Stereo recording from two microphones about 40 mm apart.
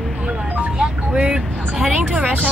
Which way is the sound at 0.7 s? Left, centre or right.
Right.